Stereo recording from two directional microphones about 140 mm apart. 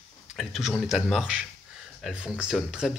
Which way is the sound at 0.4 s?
Centre (ahead or behind).